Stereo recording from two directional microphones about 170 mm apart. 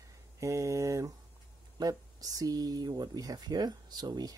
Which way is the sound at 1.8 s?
25° right (ahead or behind).